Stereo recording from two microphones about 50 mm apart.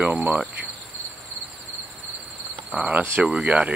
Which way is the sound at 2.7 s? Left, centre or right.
Right.